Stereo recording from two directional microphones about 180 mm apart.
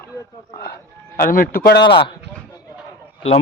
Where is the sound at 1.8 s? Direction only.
30° left (ahead or behind).